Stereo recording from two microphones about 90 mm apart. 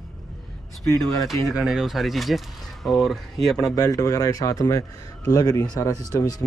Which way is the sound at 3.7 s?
40° left (ahead or behind).